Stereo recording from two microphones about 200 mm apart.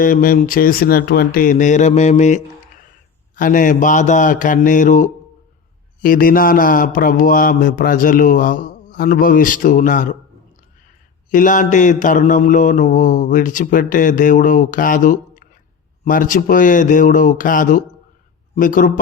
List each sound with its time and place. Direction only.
0.0 s speech: 45° left (ahead or behind)
3.3 s mantra: 40° left (ahead or behind)
6.0 s speech: 45° left (ahead or behind)
11.3 s mantra: 40° left (ahead or behind)
18.5 s speech: 40° left (ahead or behind)